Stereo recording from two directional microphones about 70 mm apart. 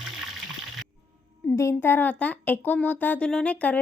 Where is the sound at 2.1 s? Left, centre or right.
Left.